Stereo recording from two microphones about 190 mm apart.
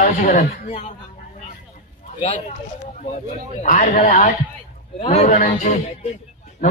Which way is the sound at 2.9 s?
40° left (ahead or behind).